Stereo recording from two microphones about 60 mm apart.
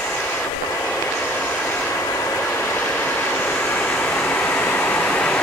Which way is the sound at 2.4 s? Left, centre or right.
Left.